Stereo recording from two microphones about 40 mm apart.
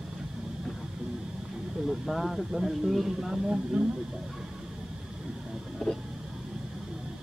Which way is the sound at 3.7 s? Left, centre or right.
Centre.